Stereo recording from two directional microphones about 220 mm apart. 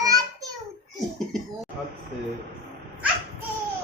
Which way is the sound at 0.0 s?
15° right (ahead or behind).